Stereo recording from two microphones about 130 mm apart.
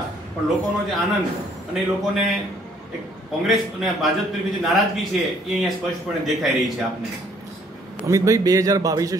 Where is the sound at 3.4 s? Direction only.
Centre (ahead or behind).